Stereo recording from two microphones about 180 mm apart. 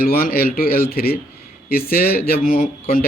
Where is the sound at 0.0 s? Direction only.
55° left (ahead or behind).